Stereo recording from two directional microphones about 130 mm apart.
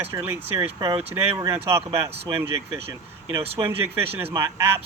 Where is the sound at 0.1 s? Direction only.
15° right (ahead or behind).